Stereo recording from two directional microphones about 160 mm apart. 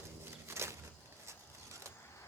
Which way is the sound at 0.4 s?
15° right (ahead or behind).